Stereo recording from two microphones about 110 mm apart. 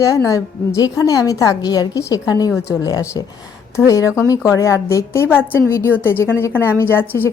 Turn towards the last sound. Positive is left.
turn(degrees=20)  # may be behind; listen again after turning